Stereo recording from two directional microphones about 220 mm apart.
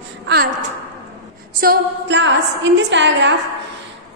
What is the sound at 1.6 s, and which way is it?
A woman's voice, 45° right (ahead or behind).